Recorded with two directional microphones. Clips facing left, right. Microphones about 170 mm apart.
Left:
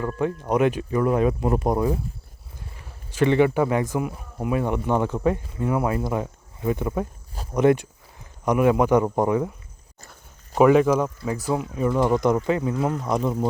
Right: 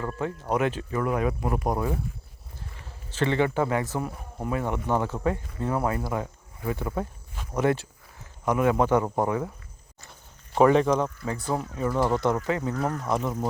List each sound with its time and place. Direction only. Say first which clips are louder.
0.4 s speech: left 4 dB; 15° left (ahead or behind)
10.6 s speech: left 3 dB; 10° left (ahead or behind)
11.7 s speech: left 4 dB; 20° left (ahead or behind)